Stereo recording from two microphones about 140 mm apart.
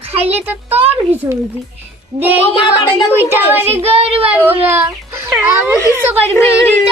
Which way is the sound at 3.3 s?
15° right (ahead or behind).